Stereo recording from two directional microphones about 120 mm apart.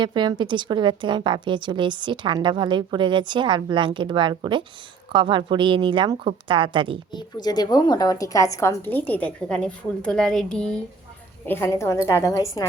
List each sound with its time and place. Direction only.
0.0 s a woman's voice: 40° right (ahead or behind)
7.1 s a woman's voice: 35° left (ahead or behind); by 10.8 s 5° left (ahead or behind)
11.4 s a woman's voice: 20° left (ahead or behind)